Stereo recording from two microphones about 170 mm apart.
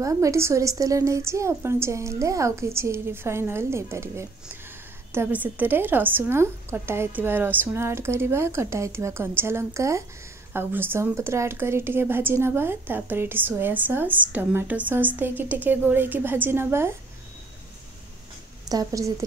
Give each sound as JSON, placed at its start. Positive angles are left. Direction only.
{"t": 0.0, "sound": "speech", "side_deg": -20}
{"t": 18.7, "sound": "a woman's voice", "side_deg": -20}